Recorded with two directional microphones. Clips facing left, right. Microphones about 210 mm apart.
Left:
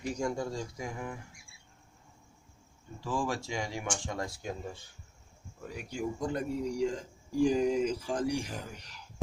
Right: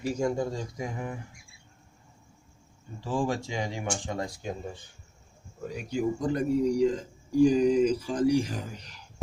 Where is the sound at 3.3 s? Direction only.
20° right (ahead or behind).